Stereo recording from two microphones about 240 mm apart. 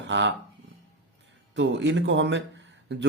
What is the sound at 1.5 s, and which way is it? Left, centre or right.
Speech, right.